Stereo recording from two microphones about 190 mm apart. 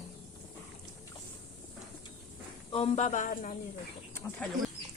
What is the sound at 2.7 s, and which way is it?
Speech, 30° left (ahead or behind).